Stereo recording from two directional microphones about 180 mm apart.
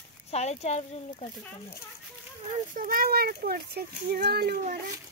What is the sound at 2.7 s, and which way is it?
Speech, 50° right (ahead or behind).